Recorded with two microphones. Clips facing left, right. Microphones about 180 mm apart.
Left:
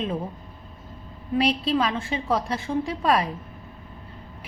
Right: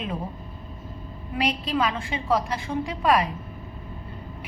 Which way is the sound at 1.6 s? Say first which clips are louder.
Left 2 dB; 30° left (ahead or behind).